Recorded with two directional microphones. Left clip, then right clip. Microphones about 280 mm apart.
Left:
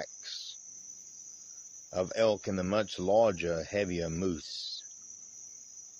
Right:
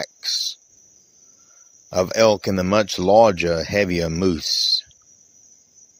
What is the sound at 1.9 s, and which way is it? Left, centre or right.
Speech, right.